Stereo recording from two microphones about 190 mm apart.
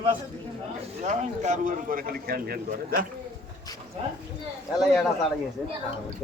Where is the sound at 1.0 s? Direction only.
40° right (ahead or behind).